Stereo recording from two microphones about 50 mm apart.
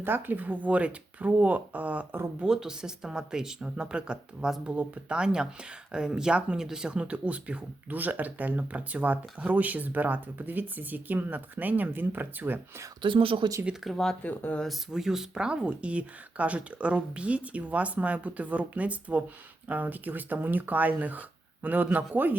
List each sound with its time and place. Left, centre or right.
0.0 s speech: right
2.4 s speech: centre; by 12.5 s right
13.9 s speech: centre
14.3 s speech: left
14.7 s speech: centre; by 22.4 s right